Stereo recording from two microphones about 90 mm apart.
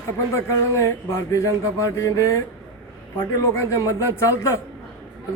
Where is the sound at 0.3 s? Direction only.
35° left (ahead or behind).